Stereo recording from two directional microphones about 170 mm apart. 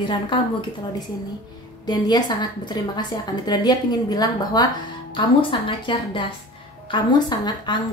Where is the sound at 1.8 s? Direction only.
25° left (ahead or behind).